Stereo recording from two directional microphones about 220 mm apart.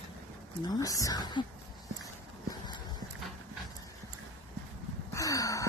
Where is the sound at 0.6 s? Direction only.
15° left (ahead or behind).